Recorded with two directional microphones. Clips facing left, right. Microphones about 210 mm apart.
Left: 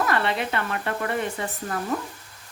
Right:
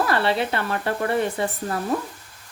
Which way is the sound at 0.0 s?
30° right (ahead or behind).